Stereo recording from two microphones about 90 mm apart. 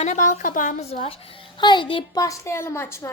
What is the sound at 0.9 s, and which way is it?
A child's voice, 75° left (ahead or behind).